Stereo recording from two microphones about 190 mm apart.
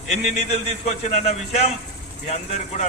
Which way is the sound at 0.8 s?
35° left (ahead or behind).